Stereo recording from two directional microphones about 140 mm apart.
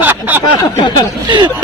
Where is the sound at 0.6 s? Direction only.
30° left (ahead or behind).